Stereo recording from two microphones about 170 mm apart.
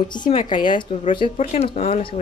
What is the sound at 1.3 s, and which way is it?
Speech, 40° left (ahead or behind).